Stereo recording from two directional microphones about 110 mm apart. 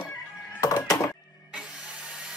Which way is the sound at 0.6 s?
35° left (ahead or behind).